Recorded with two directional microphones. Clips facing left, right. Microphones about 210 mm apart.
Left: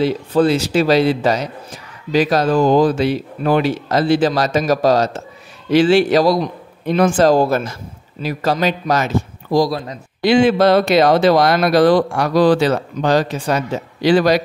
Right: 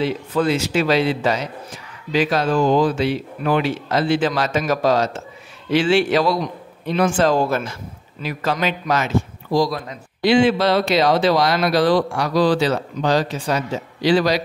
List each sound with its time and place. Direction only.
0.0 s speech: 35° left (ahead or behind)
10.2 s speech: 45° left (ahead or behind)